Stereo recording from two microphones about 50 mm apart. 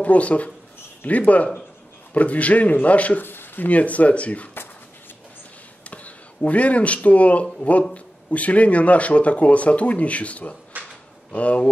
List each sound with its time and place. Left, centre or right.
0.0 s speech: left
3.2 s speech: left
5.9 s speech: left
10.8 s drawer open or close: right
11.3 s speech: left